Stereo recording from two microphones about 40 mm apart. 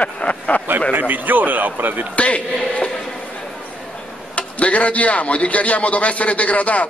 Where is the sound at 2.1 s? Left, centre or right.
Left.